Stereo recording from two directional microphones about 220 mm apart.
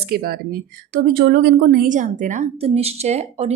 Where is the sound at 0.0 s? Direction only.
45° right (ahead or behind).